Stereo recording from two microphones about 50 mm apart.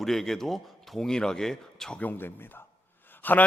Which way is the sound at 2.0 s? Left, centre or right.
Left.